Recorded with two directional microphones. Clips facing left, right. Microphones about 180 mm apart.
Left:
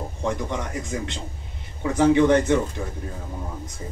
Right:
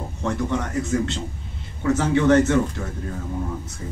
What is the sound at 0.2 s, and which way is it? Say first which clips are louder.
A man's voice: right 3 dB; 15° left (ahead or behind).